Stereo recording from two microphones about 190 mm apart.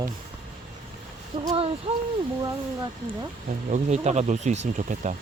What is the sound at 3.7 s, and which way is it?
Speech, 35° right (ahead or behind).